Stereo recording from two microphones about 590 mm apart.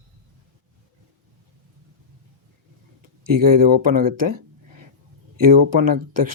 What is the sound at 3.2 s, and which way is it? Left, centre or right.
Speech, right.